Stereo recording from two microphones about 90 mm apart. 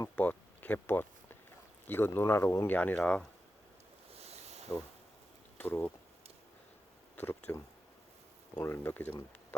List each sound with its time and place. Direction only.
0.2 s a sound: 20° left (ahead or behind)
1.9 s speech: 25° left (ahead or behind)
4.7 s speech: 30° left (ahead or behind)
7.2 s speech: 25° left (ahead or behind)
8.6 s speech: 25° left (ahead or behind)